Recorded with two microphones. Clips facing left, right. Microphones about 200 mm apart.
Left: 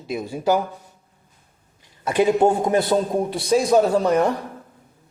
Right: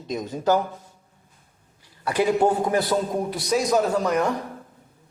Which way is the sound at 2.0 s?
25° left (ahead or behind).